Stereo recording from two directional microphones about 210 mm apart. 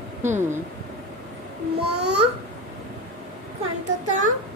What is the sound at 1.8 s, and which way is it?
Speech, 50° right (ahead or behind).